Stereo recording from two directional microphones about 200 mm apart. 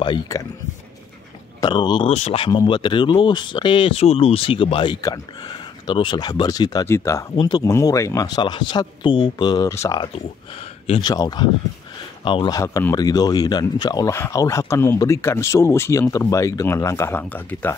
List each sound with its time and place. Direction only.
0.0 s speech: 20° left (ahead or behind)
1.6 s speech: 20° left (ahead or behind)
10.6 s speech: 25° left (ahead or behind); by 17.7 s 10° left (ahead or behind)